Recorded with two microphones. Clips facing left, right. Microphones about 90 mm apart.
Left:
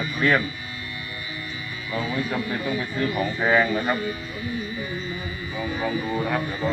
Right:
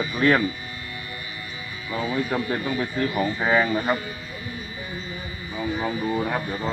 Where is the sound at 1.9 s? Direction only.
25° right (ahead or behind).